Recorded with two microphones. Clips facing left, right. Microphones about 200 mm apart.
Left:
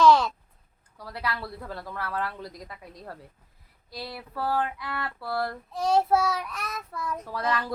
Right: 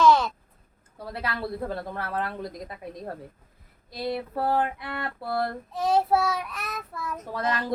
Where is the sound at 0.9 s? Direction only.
25° right (ahead or behind).